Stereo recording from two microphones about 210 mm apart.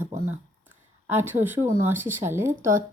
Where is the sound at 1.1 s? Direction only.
10° right (ahead or behind).